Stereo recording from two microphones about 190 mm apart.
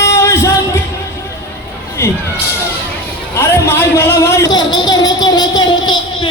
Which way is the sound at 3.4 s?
15° left (ahead or behind).